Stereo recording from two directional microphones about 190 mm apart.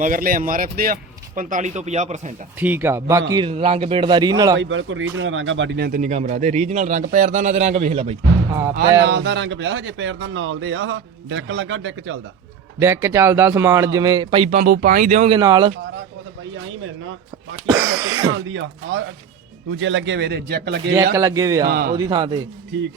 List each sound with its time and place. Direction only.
0.0 s speech: 45° right (ahead or behind)
2.6 s a man's voice: 10° right (ahead or behind)
4.6 s speech: 85° right; by 8.1 s 35° right (ahead or behind)
8.7 s speech: 60° right (ahead or behind); by 12.1 s 85° right
12.8 s speech: 15° right (ahead or behind)
14.5 s speech: 45° right (ahead or behind)
15.3 s a man's voice: 25° right (ahead or behind)
17.7 s speech: 15° right (ahead or behind)
18.3 s speech: 90° right; by 20.9 s 60° right (ahead or behind)
20.9 s speech: 15° right (ahead or behind)
21.7 s speech: 50° right (ahead or behind)
21.9 s a man's voice: 20° right (ahead or behind)